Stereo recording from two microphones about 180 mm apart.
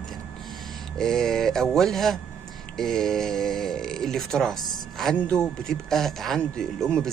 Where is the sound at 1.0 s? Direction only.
5° left (ahead or behind).